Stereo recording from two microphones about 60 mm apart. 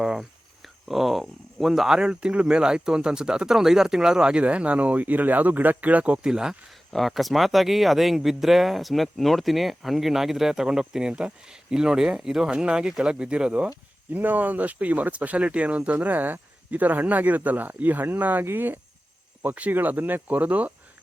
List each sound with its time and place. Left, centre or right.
0.0 s a sound: centre
2.0 s speech: centre
6.2 s speech: centre
6.9 s speech: centre; by 20.7 s right